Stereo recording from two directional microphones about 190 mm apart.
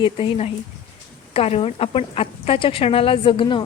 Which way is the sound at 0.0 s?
30° left (ahead or behind).